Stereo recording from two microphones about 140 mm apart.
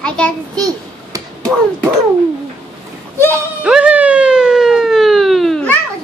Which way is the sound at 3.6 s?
10° right (ahead or behind).